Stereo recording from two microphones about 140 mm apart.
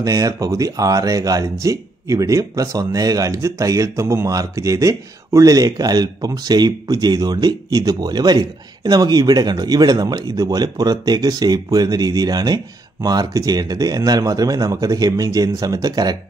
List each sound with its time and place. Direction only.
0.0 s speech: 25° right (ahead or behind)